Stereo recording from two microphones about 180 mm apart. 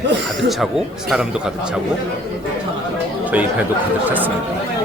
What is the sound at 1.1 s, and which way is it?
Speech, 5° right (ahead or behind).